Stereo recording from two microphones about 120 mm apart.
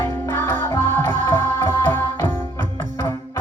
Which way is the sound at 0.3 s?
15° left (ahead or behind).